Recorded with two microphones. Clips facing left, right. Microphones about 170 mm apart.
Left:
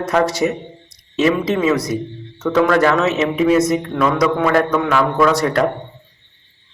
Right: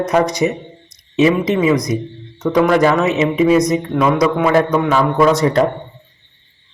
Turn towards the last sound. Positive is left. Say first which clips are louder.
# right 2 dB
turn(degrees=-20)  # may be behind; listen again after turning